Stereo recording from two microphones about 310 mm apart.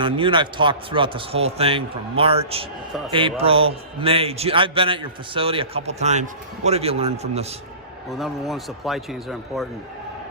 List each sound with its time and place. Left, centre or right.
0.0 s a man's voice: centre
8.1 s a man's voice: centre